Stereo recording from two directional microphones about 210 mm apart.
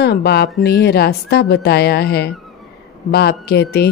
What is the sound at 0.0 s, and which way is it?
A woman's voice, 50° left (ahead or behind).